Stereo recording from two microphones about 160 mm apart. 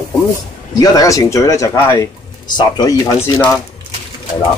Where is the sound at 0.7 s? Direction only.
20° left (ahead or behind).